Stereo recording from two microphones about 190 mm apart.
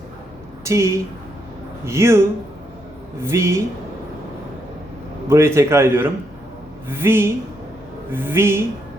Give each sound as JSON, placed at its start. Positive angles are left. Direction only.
{"t": 0.6, "sound": "a woman's voice", "side_deg": -15}
{"t": 5.3, "sound": "a man's voice", "side_deg": -15}